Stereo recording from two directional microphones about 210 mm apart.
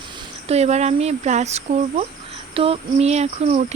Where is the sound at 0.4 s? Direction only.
30° right (ahead or behind).